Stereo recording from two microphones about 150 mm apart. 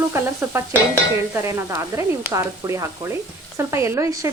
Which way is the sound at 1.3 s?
20° right (ahead or behind).